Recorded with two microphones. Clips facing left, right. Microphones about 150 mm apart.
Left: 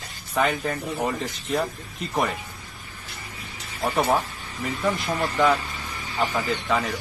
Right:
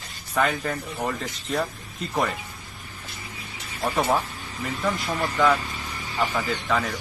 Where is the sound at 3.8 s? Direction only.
15° left (ahead or behind).